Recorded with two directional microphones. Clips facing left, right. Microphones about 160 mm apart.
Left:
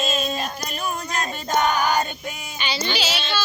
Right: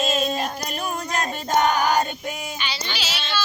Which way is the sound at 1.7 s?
40° right (ahead or behind).